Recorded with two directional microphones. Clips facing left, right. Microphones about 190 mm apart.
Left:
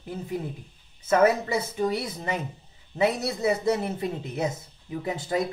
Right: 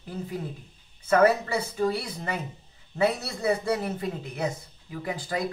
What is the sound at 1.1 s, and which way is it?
Speech, 20° left (ahead or behind).